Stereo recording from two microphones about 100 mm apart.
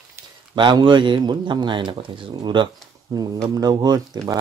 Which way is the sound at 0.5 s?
50° right (ahead or behind).